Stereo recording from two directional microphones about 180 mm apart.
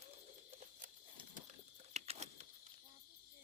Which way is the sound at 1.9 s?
35° right (ahead or behind).